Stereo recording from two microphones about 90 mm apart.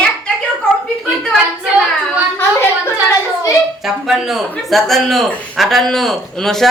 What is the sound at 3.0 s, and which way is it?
Speech, 35° left (ahead or behind).